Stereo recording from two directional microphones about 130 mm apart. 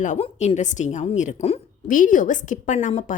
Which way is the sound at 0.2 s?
60° left (ahead or behind).